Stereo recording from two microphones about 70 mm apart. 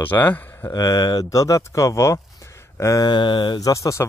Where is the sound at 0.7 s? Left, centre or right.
Left.